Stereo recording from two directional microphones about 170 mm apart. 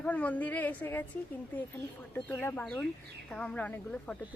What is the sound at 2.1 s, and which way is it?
Speech, 10° left (ahead or behind).